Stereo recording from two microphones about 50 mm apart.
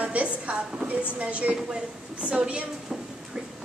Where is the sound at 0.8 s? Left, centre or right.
Right.